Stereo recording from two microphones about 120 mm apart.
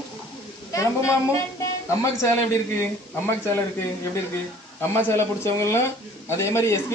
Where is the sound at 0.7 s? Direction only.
25° left (ahead or behind).